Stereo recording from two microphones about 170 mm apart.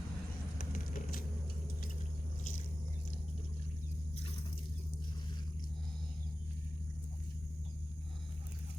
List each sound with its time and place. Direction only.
0.6 s vehicle: 55° left (ahead or behind)